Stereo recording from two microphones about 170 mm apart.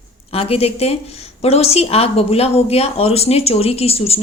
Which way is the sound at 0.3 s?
35° left (ahead or behind).